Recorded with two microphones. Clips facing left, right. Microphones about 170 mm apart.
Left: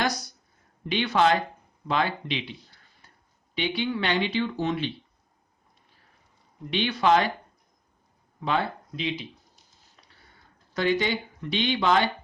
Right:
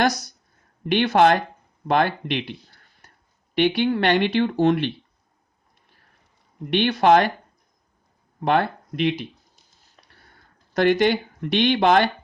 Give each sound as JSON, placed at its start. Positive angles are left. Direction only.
{"t": 0.0, "sound": "speech", "side_deg": -85}
{"t": 1.1, "sound": "speech", "side_deg": -60}
{"t": 3.5, "sound": "speech", "side_deg": -70}
{"t": 6.7, "sound": "speech", "side_deg": -60}
{"t": 8.4, "sound": "speech", "side_deg": -60}
{"t": 10.8, "sound": "speech", "side_deg": -75}